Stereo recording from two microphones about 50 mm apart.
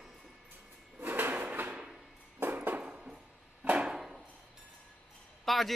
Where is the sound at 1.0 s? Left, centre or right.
Right.